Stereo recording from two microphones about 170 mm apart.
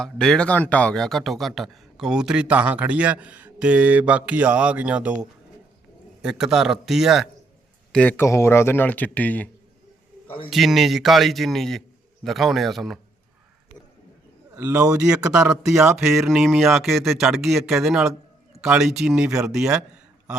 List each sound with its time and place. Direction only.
0.0 s speech: 5° left (ahead or behind)
7.9 s speech: 10° left (ahead or behind)
10.5 s speech: centre (ahead or behind)
14.5 s speech: 10° right (ahead or behind)